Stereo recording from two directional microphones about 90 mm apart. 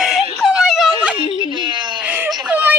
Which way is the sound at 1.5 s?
55° right (ahead or behind).